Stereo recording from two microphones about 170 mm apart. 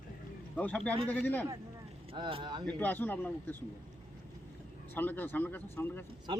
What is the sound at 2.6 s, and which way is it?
Speech, 10° left (ahead or behind).